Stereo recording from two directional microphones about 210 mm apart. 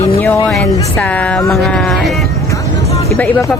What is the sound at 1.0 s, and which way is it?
Speech, 5° left (ahead or behind).